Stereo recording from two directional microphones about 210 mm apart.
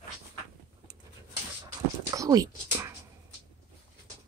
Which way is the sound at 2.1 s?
15° right (ahead or behind).